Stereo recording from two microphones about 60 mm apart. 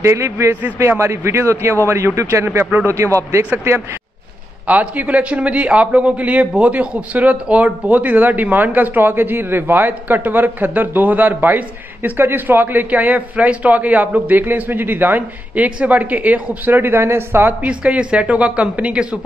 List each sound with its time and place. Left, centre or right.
0.0 s a man's voice: right
4.6 s a man's voice: right
17.6 s a man's voice: centre